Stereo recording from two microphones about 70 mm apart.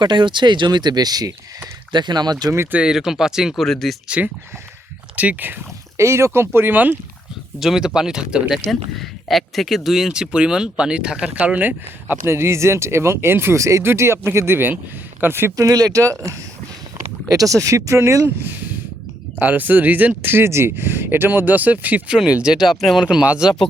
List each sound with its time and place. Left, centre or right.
0.0 s speech: right
1.9 s speech: right
2.7 s speech: centre
3.6 s speech: centre
5.1 s speech: right
6.0 s speech: right
7.6 s speech: centre
8.7 s speech: centre; by 15.5 s right
15.5 s speech: right
17.2 s speech: right
19.4 s speech: right; by 23.0 s centre
23.0 s speech: centre